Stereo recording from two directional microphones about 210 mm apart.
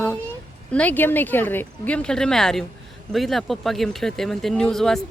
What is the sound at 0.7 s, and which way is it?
Speech, 5° left (ahead or behind).